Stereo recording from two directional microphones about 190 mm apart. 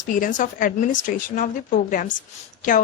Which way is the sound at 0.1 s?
45° left (ahead or behind).